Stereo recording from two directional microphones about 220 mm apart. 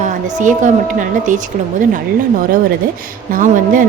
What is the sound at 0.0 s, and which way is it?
Speech, 35° right (ahead or behind).